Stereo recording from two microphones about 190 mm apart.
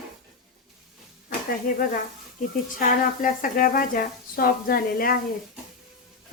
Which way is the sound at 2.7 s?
45° left (ahead or behind).